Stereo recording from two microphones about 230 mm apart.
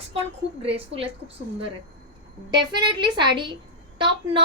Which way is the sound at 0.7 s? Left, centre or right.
Right.